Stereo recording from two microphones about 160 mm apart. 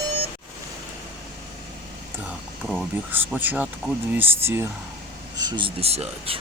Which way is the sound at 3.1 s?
10° right (ahead or behind).